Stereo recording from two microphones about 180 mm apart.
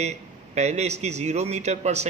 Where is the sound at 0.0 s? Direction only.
40° right (ahead or behind).